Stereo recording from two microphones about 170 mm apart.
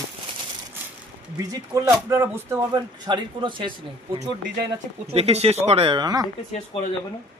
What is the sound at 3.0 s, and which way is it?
Speech, 25° right (ahead or behind).